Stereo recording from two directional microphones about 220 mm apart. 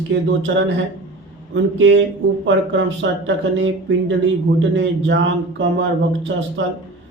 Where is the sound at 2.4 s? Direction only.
60° right (ahead or behind).